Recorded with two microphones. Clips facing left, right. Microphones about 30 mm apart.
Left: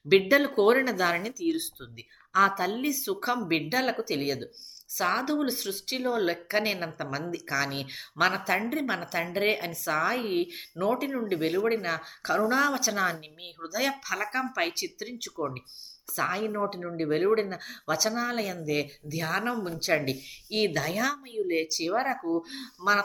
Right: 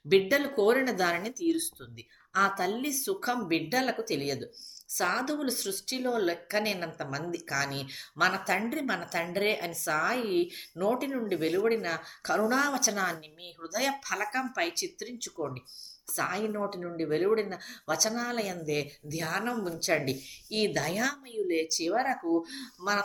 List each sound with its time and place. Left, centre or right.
0.1 s a woman's voice: centre
15.4 s speech: left
16.1 s a woman's voice: centre